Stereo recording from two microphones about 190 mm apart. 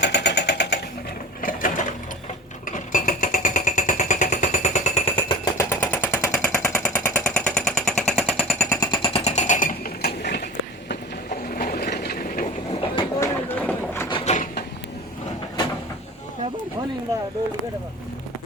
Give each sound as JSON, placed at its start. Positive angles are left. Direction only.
{"t": 0.0, "sound": "vehicle", "side_deg": 65}
{"t": 1.4, "sound": "sewing machine", "side_deg": 45}
{"t": 2.6, "sound": "vehicle", "side_deg": 45}
{"t": 5.5, "sound": "machine gun", "side_deg": 10}
{"t": 8.7, "sound": "jackhammer", "side_deg": 20}
{"t": 11.3, "sound": "a sound", "side_deg": 50}
{"t": 11.9, "sound": "train", "side_deg": 55}
{"t": 13.0, "sound": "a sound", "side_deg": 15}
{"t": 14.1, "sound": "a sound", "side_deg": 35}